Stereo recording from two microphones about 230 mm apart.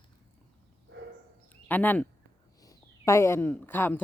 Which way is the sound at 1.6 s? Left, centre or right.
Centre.